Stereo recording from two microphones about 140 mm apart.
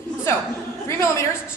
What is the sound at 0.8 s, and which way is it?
Speech, 20° left (ahead or behind).